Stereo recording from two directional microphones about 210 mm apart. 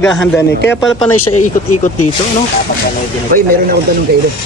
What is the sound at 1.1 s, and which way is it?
Speech, 90° left.